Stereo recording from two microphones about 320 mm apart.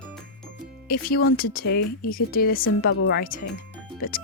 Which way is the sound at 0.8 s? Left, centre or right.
Left.